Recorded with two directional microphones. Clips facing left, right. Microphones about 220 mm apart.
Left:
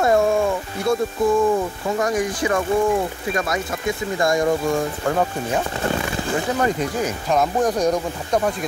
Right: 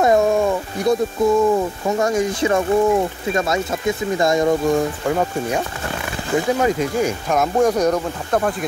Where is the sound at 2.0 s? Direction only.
25° right (ahead or behind).